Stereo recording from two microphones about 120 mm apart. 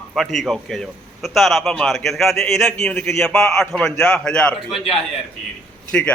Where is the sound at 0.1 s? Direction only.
Centre (ahead or behind).